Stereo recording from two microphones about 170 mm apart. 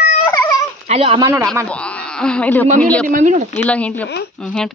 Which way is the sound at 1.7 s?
5° left (ahead or behind).